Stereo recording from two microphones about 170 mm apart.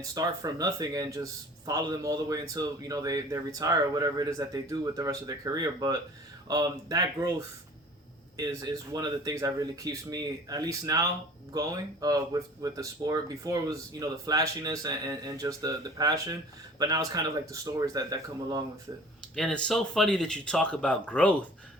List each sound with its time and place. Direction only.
0.1 s speech: 20° right (ahead or behind)
8.4 s speech: 25° right (ahead or behind)
19.4 s speech: 5° left (ahead or behind)